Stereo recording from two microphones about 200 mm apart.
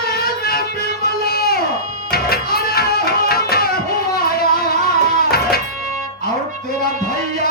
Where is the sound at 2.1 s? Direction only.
50° left (ahead or behind).